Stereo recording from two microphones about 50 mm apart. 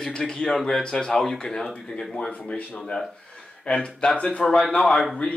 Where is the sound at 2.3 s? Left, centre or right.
Left.